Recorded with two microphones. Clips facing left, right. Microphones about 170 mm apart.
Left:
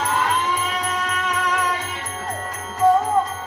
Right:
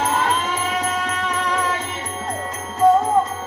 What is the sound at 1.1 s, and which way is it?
Music, 30° right (ahead or behind).